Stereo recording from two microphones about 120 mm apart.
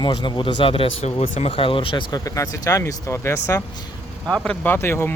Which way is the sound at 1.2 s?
80° left.